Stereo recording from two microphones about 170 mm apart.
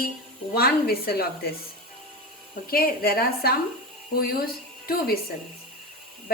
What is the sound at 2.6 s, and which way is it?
A woman's voice, 60° left (ahead or behind).